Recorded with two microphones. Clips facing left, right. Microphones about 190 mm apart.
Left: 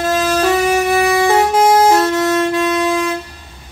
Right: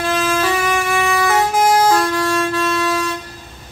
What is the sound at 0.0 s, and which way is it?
Music, 40° left (ahead or behind).